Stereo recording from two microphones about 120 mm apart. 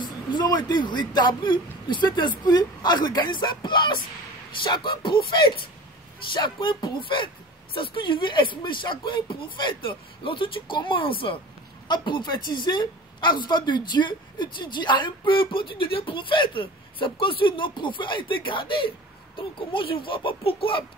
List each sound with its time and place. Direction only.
0.0 s a woman's voice: 35° left (ahead or behind)